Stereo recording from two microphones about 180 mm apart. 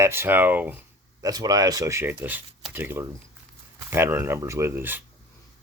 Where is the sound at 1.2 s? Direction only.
20° right (ahead or behind).